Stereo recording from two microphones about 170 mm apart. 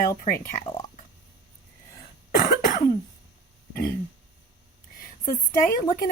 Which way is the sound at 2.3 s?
50° left (ahead or behind).